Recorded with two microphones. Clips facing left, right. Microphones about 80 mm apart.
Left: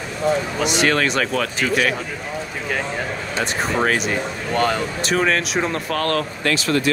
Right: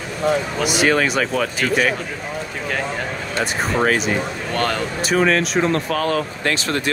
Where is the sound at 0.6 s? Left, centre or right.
Centre.